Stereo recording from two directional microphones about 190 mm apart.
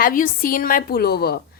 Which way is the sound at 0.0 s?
45° left (ahead or behind).